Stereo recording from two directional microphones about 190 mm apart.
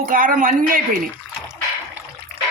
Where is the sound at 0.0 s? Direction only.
45° right (ahead or behind).